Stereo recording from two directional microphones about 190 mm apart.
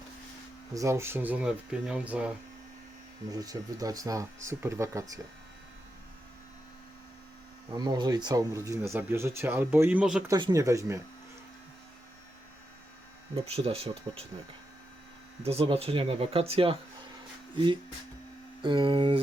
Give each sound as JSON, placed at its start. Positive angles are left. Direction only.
{"t": 0.7, "sound": "speech", "side_deg": -15}
{"t": 3.2, "sound": "speech", "side_deg": -20}
{"t": 7.7, "sound": "speech", "side_deg": -20}
{"t": 10.2, "sound": "speech", "side_deg": -20}
{"t": 13.3, "sound": "speech", "side_deg": -30}
{"t": 15.4, "sound": "speech", "side_deg": -30}
{"t": 18.6, "sound": "speech", "side_deg": -25}